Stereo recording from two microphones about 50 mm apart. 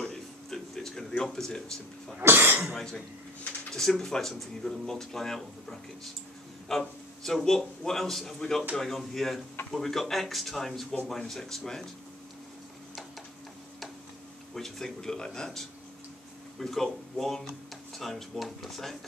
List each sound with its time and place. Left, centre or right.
0.0 s a sound: centre
1.5 s speech: centre
2.2 s speech: right
2.7 s speech: centre
14.5 s speech: centre